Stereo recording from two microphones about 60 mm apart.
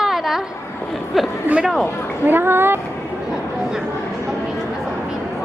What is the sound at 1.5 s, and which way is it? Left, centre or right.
Speech, centre.